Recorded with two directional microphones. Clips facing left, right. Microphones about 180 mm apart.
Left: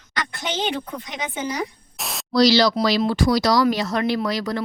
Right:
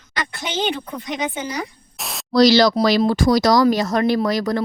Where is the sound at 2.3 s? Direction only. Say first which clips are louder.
Right 3 dB; 50° right (ahead or behind).